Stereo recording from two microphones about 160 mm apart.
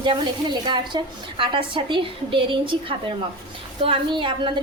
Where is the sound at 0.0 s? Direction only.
30° right (ahead or behind).